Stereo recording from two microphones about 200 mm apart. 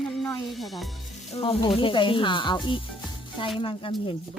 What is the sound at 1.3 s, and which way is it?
Speech, 30° left (ahead or behind).